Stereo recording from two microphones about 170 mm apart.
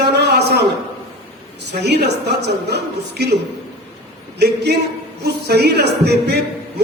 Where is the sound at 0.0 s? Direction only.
75° right (ahead or behind).